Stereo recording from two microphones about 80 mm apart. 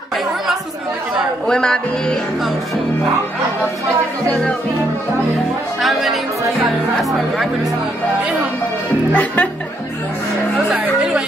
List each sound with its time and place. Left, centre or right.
1.5 s music: centre
4.3 s music: centre
5.8 s speech: centre
9.1 s speech: centre